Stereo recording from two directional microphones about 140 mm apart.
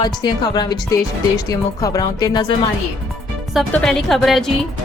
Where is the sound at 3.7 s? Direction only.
5° left (ahead or behind).